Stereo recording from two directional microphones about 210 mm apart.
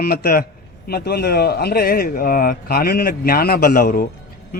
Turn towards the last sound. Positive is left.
turn(degrees=40)  # may be behind; listen again after turning